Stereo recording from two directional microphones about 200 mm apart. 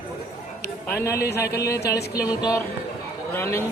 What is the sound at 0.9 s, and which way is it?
Speech, 15° left (ahead or behind).